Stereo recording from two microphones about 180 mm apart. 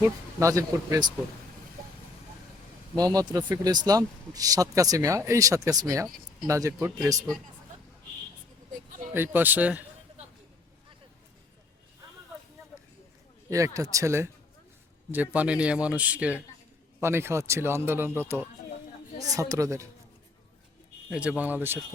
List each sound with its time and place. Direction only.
0.3 s speech: 15° right (ahead or behind)
3.0 s speech: 20° right (ahead or behind)
9.1 s speech: 10° right (ahead or behind)
13.5 s speech: 20° right (ahead or behind)
21.1 s speech: 5° right (ahead or behind)